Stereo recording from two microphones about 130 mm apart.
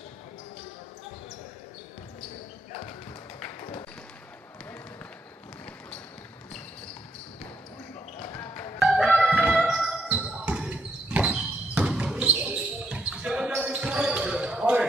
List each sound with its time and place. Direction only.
8.4 s music: 20° left (ahead or behind)
8.7 s music: centre (ahead or behind)